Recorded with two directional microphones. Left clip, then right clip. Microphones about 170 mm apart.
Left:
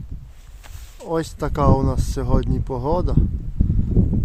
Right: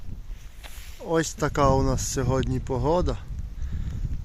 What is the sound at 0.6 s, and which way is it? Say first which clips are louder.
Speech: left 1 dB; 5° left (ahead or behind).